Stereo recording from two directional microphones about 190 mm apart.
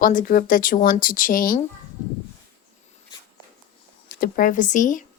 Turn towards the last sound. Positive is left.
turn(degrees=40)  # may be behind; listen again after turning